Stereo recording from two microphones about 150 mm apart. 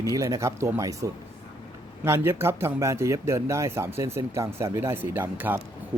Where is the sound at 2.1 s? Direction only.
15° right (ahead or behind).